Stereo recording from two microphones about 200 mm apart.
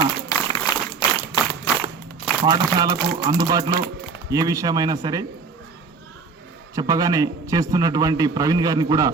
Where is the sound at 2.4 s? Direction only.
20° right (ahead or behind).